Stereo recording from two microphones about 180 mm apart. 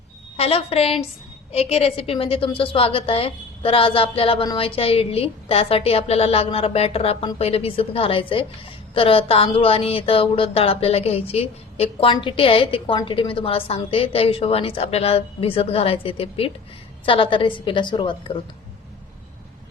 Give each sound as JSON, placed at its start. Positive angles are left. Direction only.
{"t": 0.3, "sound": "a woman's voice", "side_deg": 35}